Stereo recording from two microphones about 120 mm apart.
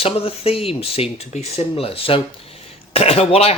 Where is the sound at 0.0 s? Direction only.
55° left (ahead or behind).